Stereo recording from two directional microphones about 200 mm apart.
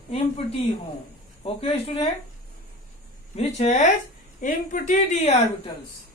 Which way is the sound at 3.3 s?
35° left (ahead or behind).